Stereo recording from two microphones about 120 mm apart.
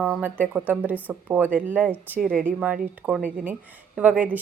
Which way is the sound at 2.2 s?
Centre (ahead or behind).